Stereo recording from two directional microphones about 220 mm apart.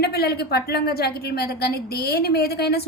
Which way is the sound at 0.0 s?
45° left (ahead or behind).